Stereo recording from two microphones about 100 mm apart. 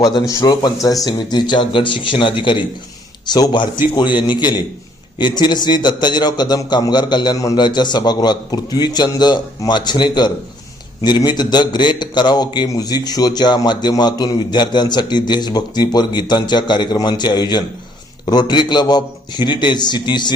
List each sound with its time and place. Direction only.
0.0 s a man's voice: 40° left (ahead or behind)
3.2 s a man's voice: 45° left (ahead or behind)